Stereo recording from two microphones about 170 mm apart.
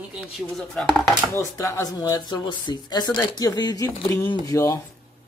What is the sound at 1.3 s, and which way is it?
Speech, 15° left (ahead or behind).